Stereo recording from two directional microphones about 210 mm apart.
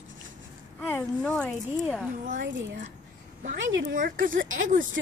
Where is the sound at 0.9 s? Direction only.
10° left (ahead or behind).